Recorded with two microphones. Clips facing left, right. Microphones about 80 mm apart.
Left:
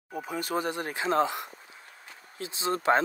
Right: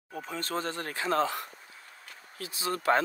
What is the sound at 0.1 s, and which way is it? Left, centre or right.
Speech, centre.